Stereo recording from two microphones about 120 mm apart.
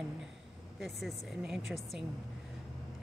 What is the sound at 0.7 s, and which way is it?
Speech, centre (ahead or behind).